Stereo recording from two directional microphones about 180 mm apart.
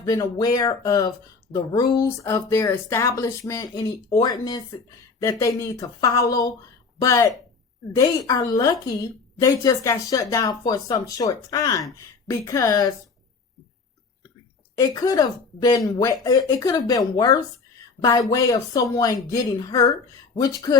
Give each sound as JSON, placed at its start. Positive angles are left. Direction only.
{"t": 0.0, "sound": "speech", "side_deg": 20}
{"t": 8.3, "sound": "speech", "side_deg": 20}
{"t": 14.8, "sound": "speech", "side_deg": 20}
{"t": 18.0, "sound": "speech", "side_deg": 20}